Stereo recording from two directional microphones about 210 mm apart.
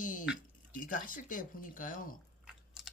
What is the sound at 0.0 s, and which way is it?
Squish, 40° left (ahead or behind).